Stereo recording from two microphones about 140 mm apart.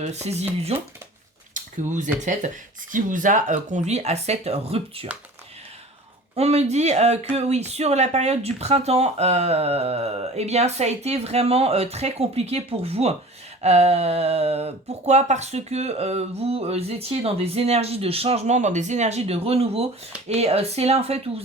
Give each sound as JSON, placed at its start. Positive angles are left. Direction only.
{"t": 0.0, "sound": "speech", "side_deg": -50}
{"t": 1.5, "sound": "a sound", "side_deg": -65}
{"t": 2.9, "sound": "speech", "side_deg": -70}
{"t": 6.3, "sound": "speech", "side_deg": -50}